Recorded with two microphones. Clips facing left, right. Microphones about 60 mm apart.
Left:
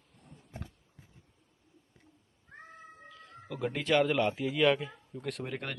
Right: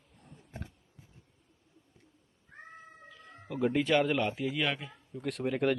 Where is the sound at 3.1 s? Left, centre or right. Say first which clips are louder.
Even; centre.